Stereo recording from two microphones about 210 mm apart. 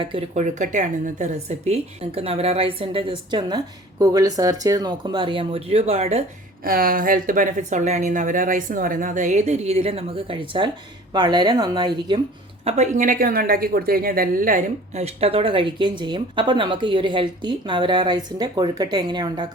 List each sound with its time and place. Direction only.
0.0 s a woman's voice: 25° right (ahead or behind)
6.7 s a woman's voice: 45° right (ahead or behind); by 12.2 s 20° right (ahead or behind)
12.6 s a woman's voice: 35° right (ahead or behind)